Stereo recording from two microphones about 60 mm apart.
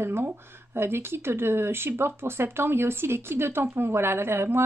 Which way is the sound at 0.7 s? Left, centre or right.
Right.